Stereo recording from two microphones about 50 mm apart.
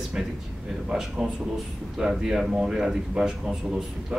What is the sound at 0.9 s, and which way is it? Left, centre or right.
A man's voice, centre.